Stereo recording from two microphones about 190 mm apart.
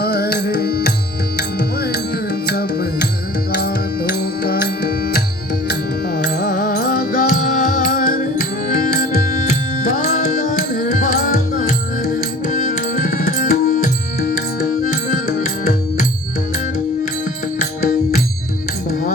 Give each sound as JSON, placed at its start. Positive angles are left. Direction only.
{"t": 0.0, "sound": "music", "side_deg": 55}
{"t": 17.7, "sound": "music", "side_deg": 45}